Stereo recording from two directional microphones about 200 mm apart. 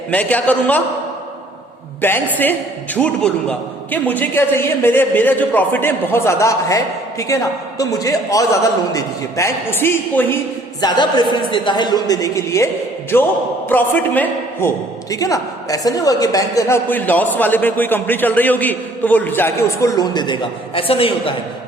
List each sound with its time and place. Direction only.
0.1 s a woman's voice: 5° left (ahead or behind)
2.0 s a woman's voice: 10° left (ahead or behind); by 21.3 s 25° left (ahead or behind)